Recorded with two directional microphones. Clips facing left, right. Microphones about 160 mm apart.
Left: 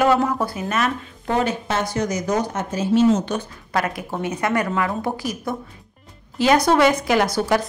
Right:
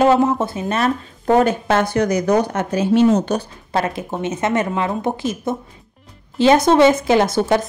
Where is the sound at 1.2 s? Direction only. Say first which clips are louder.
Right 7 dB; 50° right (ahead or behind).